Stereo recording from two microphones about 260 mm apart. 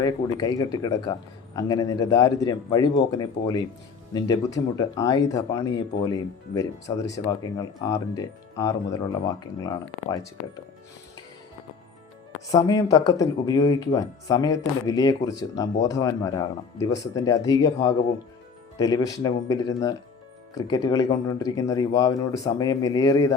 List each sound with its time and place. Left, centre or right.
0.0 s speech: centre
12.5 s speech: centre
18.8 s speech: centre